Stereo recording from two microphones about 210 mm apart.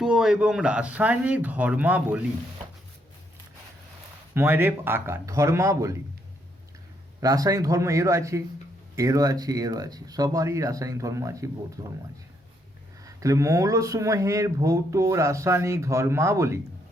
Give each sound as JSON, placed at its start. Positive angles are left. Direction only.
{"t": 0.0, "sound": "speech", "side_deg": -5}
{"t": 4.4, "sound": "speech", "side_deg": -10}
{"t": 7.2, "sound": "speech", "side_deg": -15}
{"t": 13.1, "sound": "speech", "side_deg": -15}